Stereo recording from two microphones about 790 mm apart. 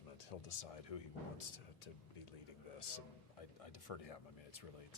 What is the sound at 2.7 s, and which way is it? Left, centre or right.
A man's voice, left.